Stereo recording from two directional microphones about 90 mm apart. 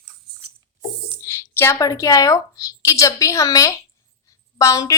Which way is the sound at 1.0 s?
25° left (ahead or behind).